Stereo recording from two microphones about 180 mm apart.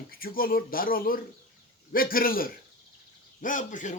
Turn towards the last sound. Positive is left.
turn(degrees=45)  # may be behind; listen again after turning